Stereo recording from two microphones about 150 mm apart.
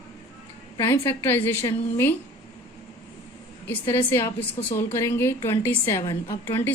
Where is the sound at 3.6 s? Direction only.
15° left (ahead or behind).